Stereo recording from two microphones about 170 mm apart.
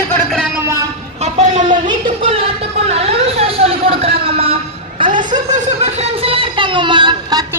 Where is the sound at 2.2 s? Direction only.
35° right (ahead or behind).